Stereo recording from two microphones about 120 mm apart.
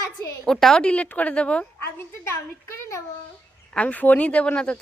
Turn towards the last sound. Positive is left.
turn(degrees=10)  # may be behind; listen again after turning